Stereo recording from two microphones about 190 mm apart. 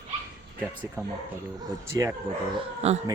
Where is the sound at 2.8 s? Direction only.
35° right (ahead or behind).